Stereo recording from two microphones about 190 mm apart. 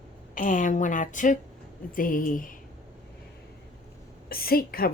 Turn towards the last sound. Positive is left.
turn(degrees=50)  # may be behind; listen again after turning